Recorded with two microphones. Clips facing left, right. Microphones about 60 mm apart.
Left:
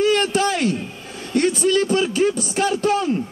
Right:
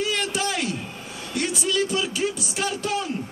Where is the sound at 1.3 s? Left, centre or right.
Left.